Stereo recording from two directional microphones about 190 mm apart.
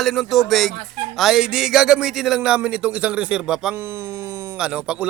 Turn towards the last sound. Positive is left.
turn(degrees=-5)  # may be behind; listen again after turning